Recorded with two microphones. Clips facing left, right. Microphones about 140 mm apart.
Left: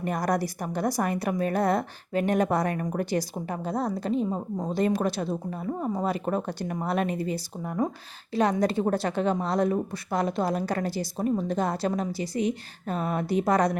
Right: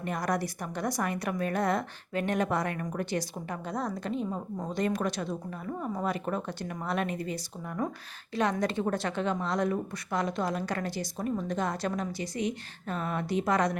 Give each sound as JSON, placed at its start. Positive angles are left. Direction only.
{"t": 0.0, "sound": "a woman's voice", "side_deg": 35}